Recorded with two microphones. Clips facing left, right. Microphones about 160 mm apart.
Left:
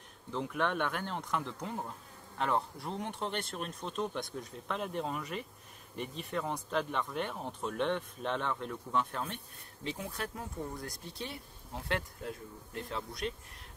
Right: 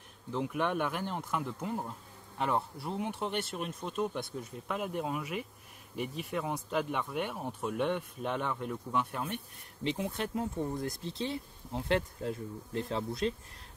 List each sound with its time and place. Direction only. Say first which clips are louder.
0.3 s speech: right 2 dB; 10° right (ahead or behind)
9.8 s speech: right 5 dB; 25° right (ahead or behind)